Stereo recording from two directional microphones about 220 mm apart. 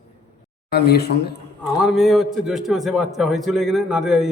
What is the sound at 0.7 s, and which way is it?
Speech, 45° left (ahead or behind).